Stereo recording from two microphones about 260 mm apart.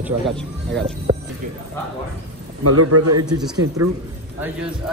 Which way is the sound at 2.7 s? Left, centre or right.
Right.